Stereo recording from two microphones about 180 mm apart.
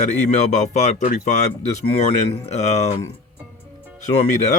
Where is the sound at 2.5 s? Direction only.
40° left (ahead or behind).